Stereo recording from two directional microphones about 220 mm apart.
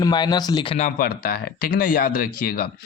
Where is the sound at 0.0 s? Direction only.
20° left (ahead or behind).